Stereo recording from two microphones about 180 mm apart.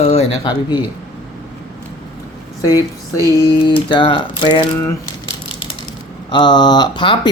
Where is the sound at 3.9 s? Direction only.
30° left (ahead or behind).